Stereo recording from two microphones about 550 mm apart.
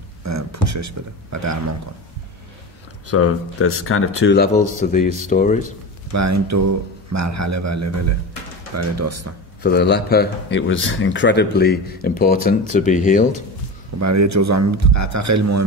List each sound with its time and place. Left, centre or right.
0.2 s speech: right
3.1 s speech: left
6.1 s speech: right
9.6 s speech: centre
13.9 s speech: right